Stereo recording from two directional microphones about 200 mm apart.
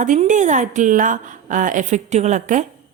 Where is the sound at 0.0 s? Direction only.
40° right (ahead or behind).